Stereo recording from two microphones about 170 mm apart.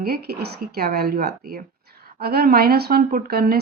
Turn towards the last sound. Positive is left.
turn(degrees=-65)  # may be behind; listen again after turning